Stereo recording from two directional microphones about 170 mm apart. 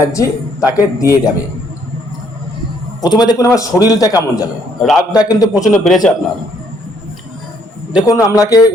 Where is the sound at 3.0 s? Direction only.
25° left (ahead or behind).